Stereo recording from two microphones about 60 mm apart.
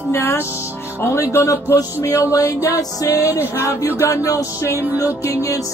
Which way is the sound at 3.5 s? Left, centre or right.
Left.